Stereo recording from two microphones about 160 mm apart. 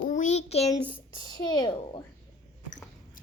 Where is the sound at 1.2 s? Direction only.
25° left (ahead or behind).